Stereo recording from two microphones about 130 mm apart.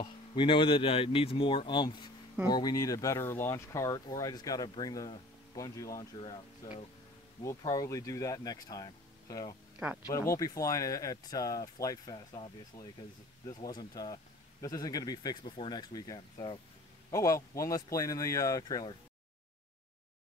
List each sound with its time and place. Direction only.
0.0 s speech: 40° left (ahead or behind)
6.2 s speech: 40° left (ahead or behind)
7.4 s speech: 25° left (ahead or behind)